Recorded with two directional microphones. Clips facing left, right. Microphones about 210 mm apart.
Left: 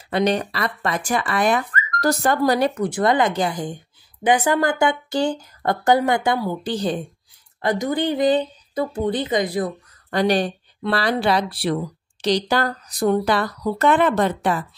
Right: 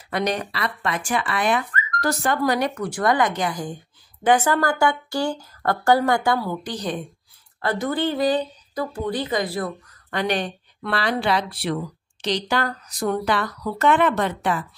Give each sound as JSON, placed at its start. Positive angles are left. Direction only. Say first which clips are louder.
{"t": 0.1, "sound": "speech", "louder": "left 4 dB", "side_deg": 30}
{"t": 0.5, "sound": "a woman's voice", "louder": "left 2 dB", "side_deg": 40}
{"t": 2.7, "sound": "speech", "louder": "left 3 dB", "side_deg": 20}
{"t": 4.2, "sound": "speech", "louder": "left 1 dB", "side_deg": 15}
{"t": 6.6, "sound": "speech", "louder": "left 5 dB", "side_deg": 30}
{"t": 7.6, "sound": "speech", "louder": "left 2 dB", "side_deg": 15}
{"t": 10.1, "sound": "a woman's voice", "louder": "left 5 dB", "side_deg": 35}